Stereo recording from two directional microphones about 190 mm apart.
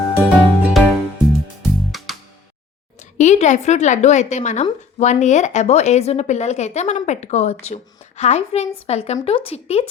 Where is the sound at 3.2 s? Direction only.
40° left (ahead or behind).